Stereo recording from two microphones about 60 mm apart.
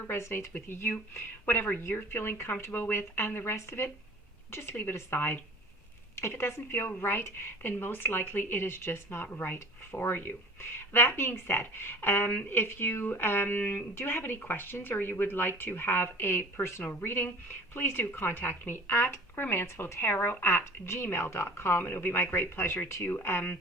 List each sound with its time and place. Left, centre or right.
0.1 s speech: left